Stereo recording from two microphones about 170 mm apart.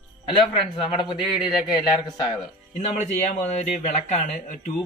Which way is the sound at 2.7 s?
40° left (ahead or behind).